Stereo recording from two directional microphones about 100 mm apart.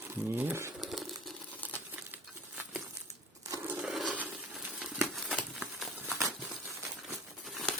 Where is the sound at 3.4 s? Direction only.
25° right (ahead or behind).